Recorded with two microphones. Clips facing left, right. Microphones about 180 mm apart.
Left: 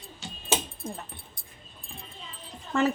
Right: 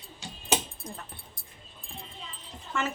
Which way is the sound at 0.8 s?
25° left (ahead or behind).